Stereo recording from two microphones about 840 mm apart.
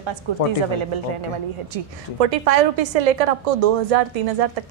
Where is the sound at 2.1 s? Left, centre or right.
Right.